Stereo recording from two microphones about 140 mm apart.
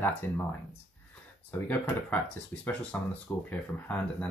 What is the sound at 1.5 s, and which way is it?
Speech, 15° left (ahead or behind).